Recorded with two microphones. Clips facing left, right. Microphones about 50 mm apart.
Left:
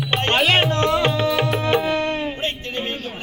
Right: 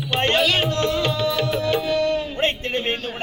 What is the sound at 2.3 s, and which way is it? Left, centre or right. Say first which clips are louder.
Music: right 3 dB; right.